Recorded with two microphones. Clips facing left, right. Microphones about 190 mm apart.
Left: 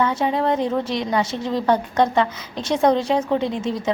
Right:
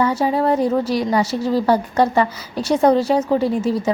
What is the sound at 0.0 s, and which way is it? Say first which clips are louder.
A woman's voice: right 3 dB; 10° right (ahead or behind).